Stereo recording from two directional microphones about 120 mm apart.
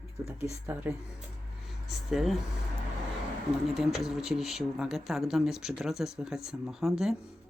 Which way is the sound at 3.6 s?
Centre (ahead or behind).